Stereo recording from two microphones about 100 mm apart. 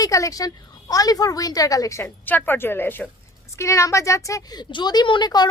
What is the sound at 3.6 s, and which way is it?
A child's voice, 30° left (ahead or behind).